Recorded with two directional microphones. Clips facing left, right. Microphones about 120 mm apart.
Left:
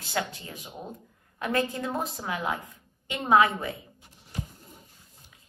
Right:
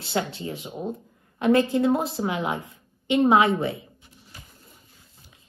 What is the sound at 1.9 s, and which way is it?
Speech, 35° right (ahead or behind).